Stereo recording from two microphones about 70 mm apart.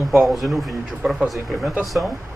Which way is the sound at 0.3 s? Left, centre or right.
Centre.